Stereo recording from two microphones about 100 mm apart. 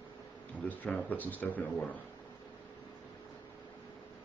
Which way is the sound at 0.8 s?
15° left (ahead or behind).